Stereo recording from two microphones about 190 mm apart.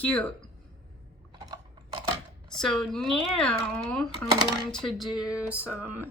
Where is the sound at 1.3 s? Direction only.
25° right (ahead or behind).